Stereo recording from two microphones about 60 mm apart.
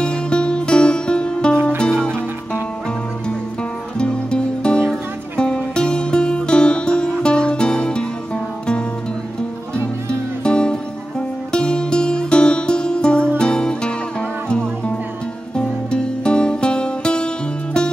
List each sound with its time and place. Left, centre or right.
0.0 s music: centre
4.0 s music: centre
10.4 s music: centre